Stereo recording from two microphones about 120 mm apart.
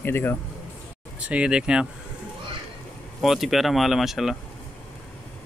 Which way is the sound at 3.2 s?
Centre (ahead or behind).